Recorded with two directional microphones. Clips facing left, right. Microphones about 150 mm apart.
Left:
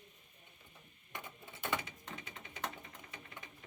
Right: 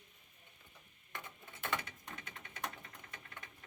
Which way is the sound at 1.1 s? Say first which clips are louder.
Left 1 dB; 10° left (ahead or behind).